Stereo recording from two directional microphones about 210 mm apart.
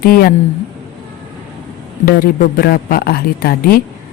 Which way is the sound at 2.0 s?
45° left (ahead or behind).